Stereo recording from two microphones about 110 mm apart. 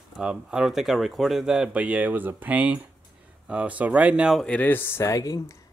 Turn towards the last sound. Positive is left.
turn(degrees=30)  # may be behind; listen again after turning